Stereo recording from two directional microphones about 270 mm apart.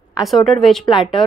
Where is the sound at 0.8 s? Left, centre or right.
Centre.